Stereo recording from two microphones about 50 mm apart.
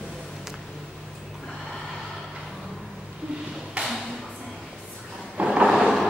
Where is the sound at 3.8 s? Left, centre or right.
Right.